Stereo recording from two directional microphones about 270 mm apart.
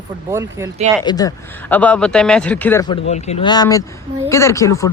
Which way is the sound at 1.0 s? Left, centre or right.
Centre.